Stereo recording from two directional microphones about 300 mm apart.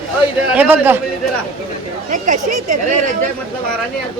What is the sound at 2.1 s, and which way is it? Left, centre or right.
Speech, right.